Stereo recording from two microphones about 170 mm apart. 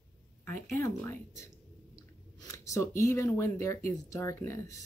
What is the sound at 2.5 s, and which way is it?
Speech, 20° left (ahead or behind).